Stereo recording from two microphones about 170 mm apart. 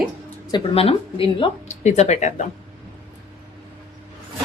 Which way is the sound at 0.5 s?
35° left (ahead or behind).